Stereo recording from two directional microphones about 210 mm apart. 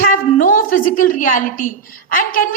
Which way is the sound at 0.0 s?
40° left (ahead or behind).